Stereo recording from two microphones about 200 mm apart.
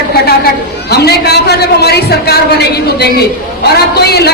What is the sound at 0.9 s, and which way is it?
A man's voice, 55° left (ahead or behind).